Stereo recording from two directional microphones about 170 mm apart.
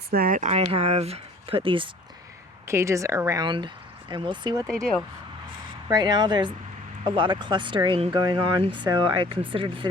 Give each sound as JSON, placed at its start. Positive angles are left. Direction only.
{"t": 0.1, "sound": "speech", "side_deg": -60}
{"t": 2.6, "sound": "speech", "side_deg": -15}
{"t": 4.6, "sound": "speech", "side_deg": 5}
{"t": 5.9, "sound": "speech", "side_deg": -25}